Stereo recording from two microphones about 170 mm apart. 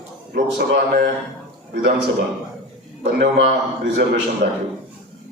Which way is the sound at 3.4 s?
85° right.